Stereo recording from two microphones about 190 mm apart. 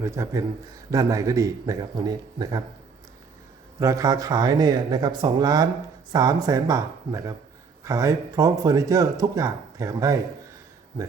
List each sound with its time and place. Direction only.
0.0 s speech: 15° right (ahead or behind)
3.8 s speech: 15° right (ahead or behind)